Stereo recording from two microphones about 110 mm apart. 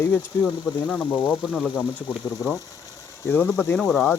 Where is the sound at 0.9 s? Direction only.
10° left (ahead or behind).